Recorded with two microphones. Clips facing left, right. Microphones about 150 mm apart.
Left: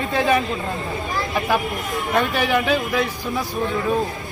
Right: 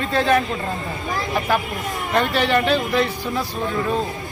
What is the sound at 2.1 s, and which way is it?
Speech, 5° left (ahead or behind).